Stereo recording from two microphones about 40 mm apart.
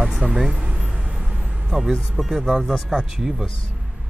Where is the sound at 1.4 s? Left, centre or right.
Right.